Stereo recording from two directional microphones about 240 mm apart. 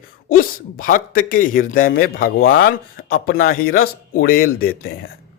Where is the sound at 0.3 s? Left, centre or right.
Left.